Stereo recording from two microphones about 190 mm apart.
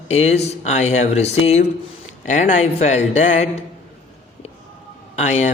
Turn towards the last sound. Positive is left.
turn(degrees=35)  # may be behind; listen again after turning